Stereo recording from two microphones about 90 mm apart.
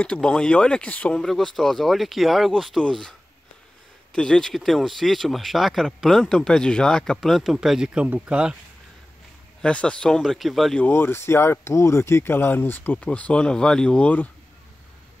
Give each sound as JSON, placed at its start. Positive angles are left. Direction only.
{"t": 0.0, "sound": "speech", "side_deg": 10}
{"t": 1.2, "sound": "speech", "side_deg": 5}
{"t": 9.6, "sound": "speech", "side_deg": 10}
{"t": 10.9, "sound": "speech", "side_deg": 25}